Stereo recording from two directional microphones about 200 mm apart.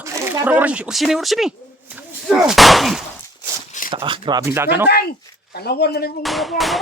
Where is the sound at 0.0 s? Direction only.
15° right (ahead or behind).